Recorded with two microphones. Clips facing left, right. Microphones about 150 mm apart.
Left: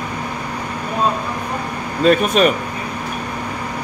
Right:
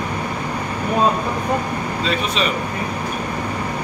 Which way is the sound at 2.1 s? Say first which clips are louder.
Left 10 dB; 50° left (ahead or behind).